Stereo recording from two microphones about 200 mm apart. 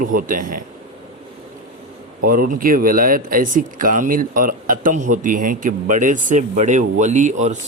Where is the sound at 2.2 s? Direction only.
45° right (ahead or behind).